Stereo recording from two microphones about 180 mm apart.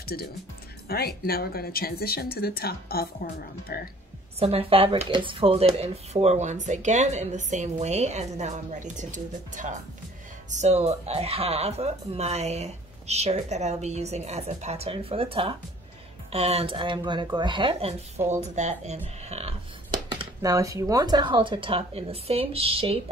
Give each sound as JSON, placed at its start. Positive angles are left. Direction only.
{"t": 0.0, "sound": "speech", "side_deg": 60}
{"t": 4.4, "sound": "speech", "side_deg": -35}
{"t": 19.2, "sound": "a sound", "side_deg": -35}
{"t": 20.1, "sound": "speech", "side_deg": -25}